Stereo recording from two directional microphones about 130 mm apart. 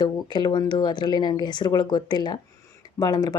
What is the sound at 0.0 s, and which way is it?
Speech, 35° left (ahead or behind).